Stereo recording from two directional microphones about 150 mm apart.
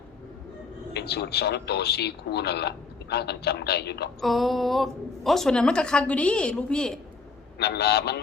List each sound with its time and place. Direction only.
0.9 s speech: 90° left
4.2 s a woman's voice: centre (ahead or behind)
7.6 s speech: 90° left